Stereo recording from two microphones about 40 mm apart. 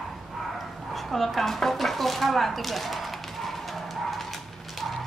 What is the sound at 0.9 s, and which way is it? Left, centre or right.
Bow-wow, centre.